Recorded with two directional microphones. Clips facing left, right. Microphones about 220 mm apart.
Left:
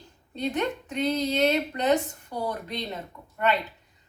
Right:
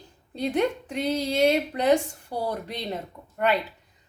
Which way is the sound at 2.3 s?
35° right (ahead or behind).